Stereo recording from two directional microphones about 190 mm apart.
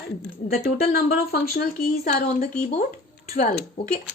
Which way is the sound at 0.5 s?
55° left (ahead or behind).